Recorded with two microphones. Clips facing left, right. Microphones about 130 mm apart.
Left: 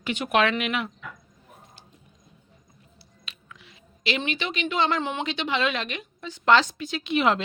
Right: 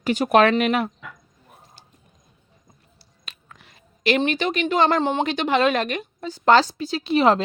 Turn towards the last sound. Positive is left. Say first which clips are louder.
# right 5 dB
turn(degrees=-35)  # may be behind; listen again after turning